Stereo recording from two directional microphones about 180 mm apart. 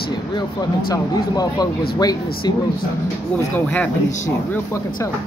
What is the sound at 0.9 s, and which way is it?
Speech, 20° left (ahead or behind).